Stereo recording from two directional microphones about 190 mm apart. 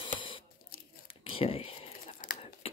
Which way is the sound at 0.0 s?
25° left (ahead or behind).